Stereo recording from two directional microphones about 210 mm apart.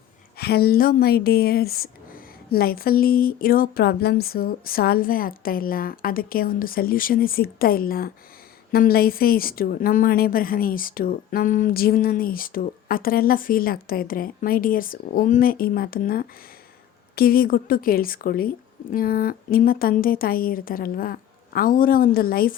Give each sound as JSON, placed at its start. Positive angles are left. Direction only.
{"t": 0.3, "sound": "speech", "side_deg": 50}